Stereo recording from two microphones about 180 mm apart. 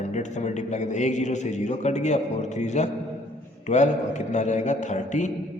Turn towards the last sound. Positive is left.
turn(degrees=40)  # may be behind; listen again after turning